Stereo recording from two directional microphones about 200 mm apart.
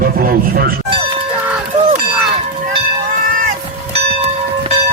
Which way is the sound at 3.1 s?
45° right (ahead or behind).